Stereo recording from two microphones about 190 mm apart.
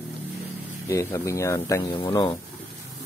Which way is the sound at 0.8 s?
15° left (ahead or behind).